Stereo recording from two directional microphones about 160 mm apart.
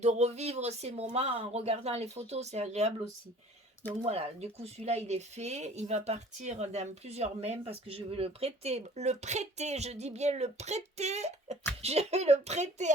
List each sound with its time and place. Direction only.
0.0 s speech: 45° right (ahead or behind)
4.0 s speech: 40° right (ahead or behind)